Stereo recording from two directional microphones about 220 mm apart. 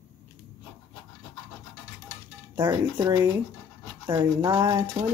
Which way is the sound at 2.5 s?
10° right (ahead or behind).